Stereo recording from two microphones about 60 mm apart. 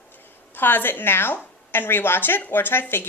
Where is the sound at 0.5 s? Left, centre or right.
Left.